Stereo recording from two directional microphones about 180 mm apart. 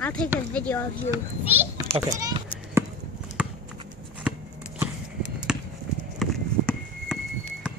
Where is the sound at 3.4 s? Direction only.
5° right (ahead or behind).